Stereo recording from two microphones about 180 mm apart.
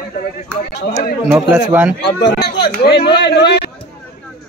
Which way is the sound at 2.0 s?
65° left (ahead or behind).